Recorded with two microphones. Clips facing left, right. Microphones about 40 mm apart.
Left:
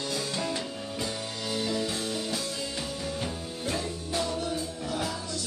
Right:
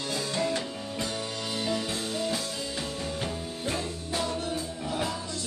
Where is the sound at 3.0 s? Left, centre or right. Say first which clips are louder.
Right 1 dB; centre.